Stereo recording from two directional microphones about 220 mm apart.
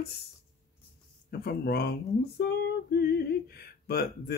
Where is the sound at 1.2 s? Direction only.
45° left (ahead or behind).